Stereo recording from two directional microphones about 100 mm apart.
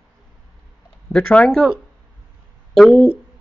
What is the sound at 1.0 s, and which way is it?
Speech, 5° left (ahead or behind).